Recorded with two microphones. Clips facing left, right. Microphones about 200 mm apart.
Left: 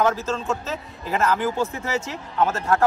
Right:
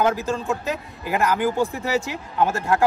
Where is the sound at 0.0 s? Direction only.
15° right (ahead or behind).